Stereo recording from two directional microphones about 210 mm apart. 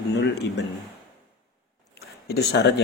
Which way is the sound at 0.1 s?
55° left (ahead or behind).